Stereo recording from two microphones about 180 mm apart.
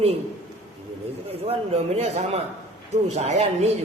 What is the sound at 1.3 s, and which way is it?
A man's voice, 35° right (ahead or behind).